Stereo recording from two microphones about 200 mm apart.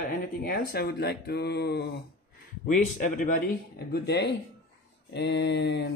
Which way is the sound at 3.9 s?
55° left (ahead or behind).